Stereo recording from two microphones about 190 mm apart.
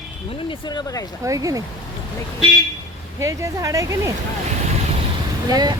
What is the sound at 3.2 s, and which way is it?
Speech, 15° right (ahead or behind).